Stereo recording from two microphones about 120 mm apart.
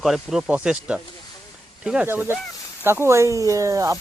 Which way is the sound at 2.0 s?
15° right (ahead or behind).